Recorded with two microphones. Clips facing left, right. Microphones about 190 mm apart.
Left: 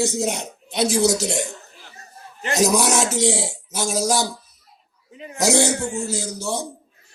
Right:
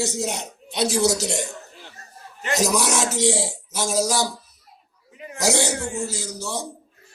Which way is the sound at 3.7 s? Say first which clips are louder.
Left 1 dB; 50° left (ahead or behind).